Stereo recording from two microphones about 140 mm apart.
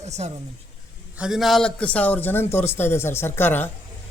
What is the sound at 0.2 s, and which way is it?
Speech, 45° right (ahead or behind).